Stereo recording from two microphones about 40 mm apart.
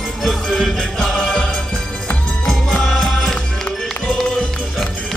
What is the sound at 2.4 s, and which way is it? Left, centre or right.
Music, centre.